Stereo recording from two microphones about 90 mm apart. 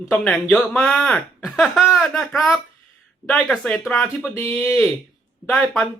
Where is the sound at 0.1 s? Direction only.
10° left (ahead or behind).